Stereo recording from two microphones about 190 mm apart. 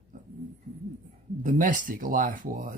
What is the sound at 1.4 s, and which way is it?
Speech, 45° right (ahead or behind).